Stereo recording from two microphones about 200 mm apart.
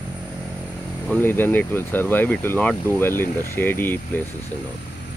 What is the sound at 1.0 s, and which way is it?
Speech, 10° left (ahead or behind).